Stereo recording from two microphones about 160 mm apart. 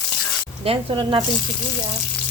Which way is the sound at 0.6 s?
35° right (ahead or behind).